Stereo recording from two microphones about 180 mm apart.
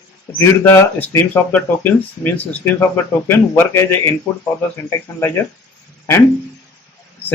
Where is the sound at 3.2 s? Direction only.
15° left (ahead or behind).